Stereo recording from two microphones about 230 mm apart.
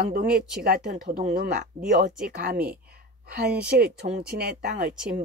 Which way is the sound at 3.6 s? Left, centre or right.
Right.